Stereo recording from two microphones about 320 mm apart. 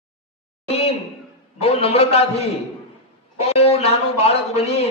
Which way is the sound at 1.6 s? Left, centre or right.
Centre.